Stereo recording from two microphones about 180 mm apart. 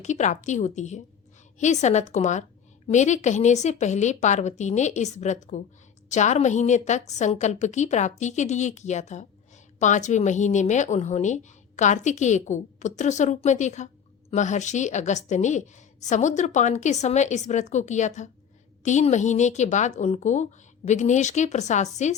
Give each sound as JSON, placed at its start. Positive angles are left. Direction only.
{"t": 0.0, "sound": "a woman's voice", "side_deg": 40}